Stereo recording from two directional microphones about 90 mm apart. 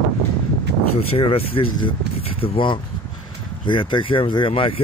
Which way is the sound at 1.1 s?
90° left.